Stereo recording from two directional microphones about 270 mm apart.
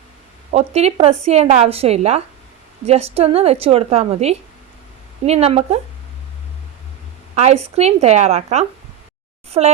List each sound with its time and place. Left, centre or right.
0.5 s a woman's voice: right
7.3 s a woman's voice: right